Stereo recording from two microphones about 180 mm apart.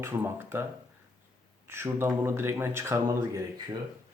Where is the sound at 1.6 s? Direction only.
15° right (ahead or behind).